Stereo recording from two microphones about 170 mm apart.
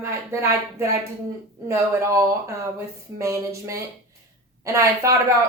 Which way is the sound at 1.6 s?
15° right (ahead or behind).